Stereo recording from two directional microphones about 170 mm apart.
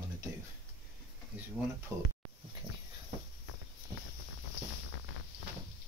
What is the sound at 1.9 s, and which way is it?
Speech, 15° right (ahead or behind).